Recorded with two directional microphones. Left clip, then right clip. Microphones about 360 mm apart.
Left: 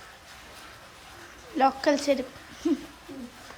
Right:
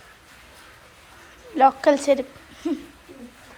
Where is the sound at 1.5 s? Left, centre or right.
Centre.